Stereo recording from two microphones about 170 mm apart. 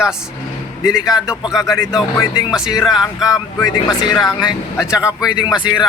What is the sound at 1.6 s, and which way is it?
Speech, 20° left (ahead or behind).